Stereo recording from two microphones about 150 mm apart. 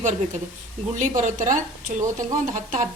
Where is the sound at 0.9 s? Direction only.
55° right (ahead or behind).